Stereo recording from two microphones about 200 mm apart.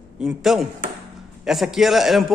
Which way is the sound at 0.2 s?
Centre (ahead or behind).